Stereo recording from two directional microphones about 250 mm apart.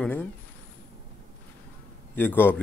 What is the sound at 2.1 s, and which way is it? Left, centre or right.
Speech, centre.